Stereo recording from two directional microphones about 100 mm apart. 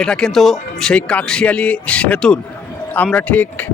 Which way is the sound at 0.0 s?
5° left (ahead or behind).